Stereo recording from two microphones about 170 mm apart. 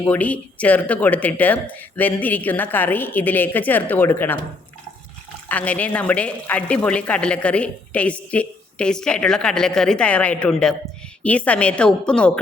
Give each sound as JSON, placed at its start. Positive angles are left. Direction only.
{"t": 0.0, "sound": "a woman's voice", "side_deg": 10}
{"t": 5.5, "sound": "a woman's voice", "side_deg": 10}